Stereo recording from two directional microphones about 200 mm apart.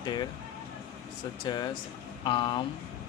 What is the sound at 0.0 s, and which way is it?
Speech, 20° left (ahead or behind).